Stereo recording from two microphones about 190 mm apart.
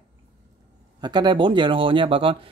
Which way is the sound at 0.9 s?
20° right (ahead or behind).